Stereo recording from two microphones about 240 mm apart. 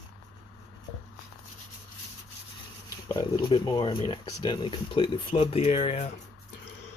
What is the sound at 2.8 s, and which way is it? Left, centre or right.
Speech, centre.